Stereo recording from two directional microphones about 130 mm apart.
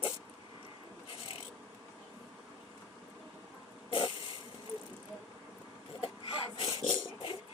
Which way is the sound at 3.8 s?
45° left (ahead or behind).